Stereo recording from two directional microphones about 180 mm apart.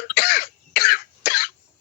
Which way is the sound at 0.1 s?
55° left (ahead or behind).